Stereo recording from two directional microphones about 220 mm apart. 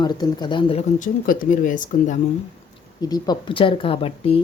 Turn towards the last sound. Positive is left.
turn(degrees=25)  # may be behind; listen again after turning